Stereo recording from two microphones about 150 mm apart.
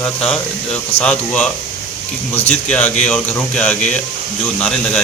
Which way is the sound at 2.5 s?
10° left (ahead or behind).